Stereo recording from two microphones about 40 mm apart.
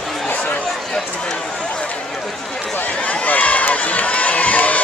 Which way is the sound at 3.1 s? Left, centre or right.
Left.